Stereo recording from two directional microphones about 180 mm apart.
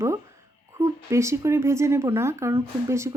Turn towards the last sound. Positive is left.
turn(degrees=-15)  # may be behind; listen again after turning